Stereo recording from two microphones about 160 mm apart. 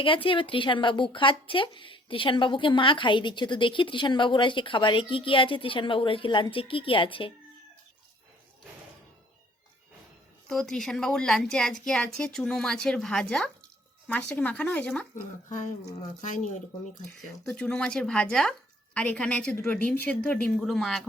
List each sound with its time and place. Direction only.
0.0 s speech: 35° left (ahead or behind)
10.5 s a woman's voice: centre (ahead or behind)
17.2 s a woman's voice: 5° left (ahead or behind)